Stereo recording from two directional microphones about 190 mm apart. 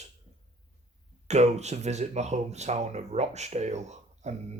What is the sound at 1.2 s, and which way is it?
Speech, 35° right (ahead or behind).